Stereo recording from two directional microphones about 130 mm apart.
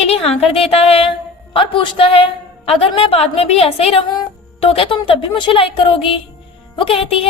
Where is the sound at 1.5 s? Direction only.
40° left (ahead or behind).